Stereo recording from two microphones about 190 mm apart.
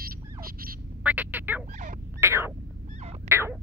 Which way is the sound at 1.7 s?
40° right (ahead or behind).